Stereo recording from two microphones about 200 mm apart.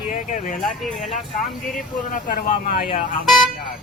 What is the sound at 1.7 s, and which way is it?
Speech, 40° left (ahead or behind).